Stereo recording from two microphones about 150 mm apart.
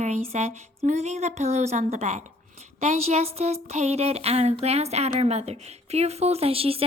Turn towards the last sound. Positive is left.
turn(degrees=-40)  # may be behind; listen again after turning